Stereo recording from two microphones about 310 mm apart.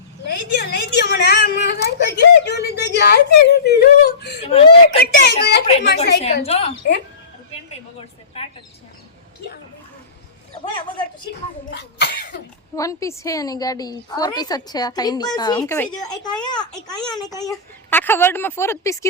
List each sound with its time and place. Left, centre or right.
0.3 s a child's voice: left
4.4 s a woman's voice: centre
4.9 s a child's voice: left
8.4 s a sound: centre
10.7 s a woman's voice: centre
11.8 s cough: left
12.7 s a woman's voice: centre